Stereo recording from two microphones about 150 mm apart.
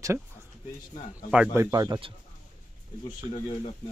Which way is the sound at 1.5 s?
25° right (ahead or behind).